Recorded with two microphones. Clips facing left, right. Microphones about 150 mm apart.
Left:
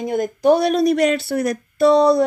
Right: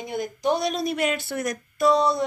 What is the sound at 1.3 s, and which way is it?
Speech, 30° left (ahead or behind).